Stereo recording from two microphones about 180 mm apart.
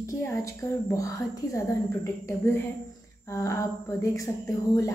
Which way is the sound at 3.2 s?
15° left (ahead or behind).